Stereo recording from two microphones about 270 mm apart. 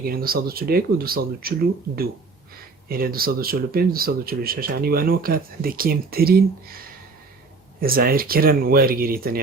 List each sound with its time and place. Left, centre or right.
0.0 s speech: right
2.9 s speech: right